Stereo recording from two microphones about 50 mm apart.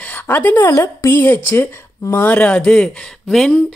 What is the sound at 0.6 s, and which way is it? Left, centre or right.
Speech, left.